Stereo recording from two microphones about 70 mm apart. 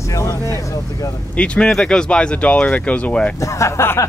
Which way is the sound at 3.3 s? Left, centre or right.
Left.